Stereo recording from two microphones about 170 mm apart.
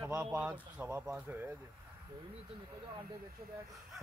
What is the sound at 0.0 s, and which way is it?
Speech, 15° right (ahead or behind).